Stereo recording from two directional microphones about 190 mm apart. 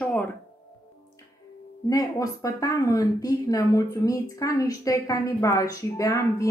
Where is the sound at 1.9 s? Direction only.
20° left (ahead or behind).